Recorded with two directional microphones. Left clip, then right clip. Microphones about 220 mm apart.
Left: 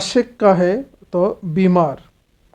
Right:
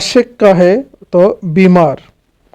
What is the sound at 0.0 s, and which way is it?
Speech, 35° right (ahead or behind).